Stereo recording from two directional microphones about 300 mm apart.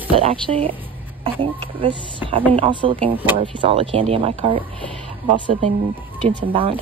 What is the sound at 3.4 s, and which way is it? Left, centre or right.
Speech, centre.